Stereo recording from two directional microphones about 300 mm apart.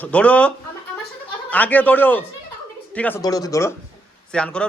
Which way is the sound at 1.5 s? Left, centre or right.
Centre.